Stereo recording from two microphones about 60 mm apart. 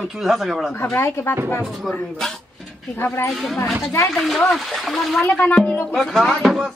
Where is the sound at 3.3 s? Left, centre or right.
Centre.